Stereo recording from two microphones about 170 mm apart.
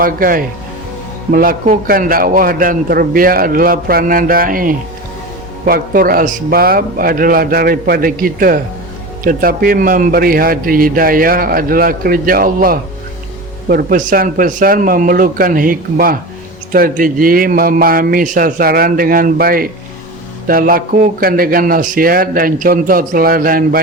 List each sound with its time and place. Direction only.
0.0 s a man's voice: 55° right (ahead or behind)